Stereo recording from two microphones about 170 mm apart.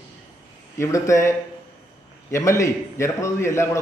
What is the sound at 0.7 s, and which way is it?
A man's voice, 15° left (ahead or behind).